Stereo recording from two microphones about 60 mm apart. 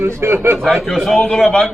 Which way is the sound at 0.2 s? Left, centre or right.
Right.